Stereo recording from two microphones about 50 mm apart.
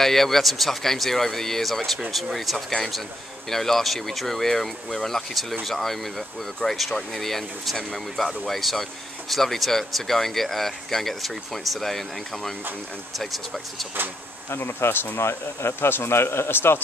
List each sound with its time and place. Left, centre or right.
0.0 s speech: centre
14.5 s speech: left